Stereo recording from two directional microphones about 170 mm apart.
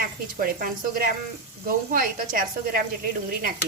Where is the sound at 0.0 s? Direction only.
60° right (ahead or behind).